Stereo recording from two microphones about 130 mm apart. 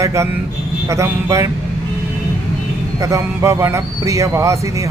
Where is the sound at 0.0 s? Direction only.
20° right (ahead or behind).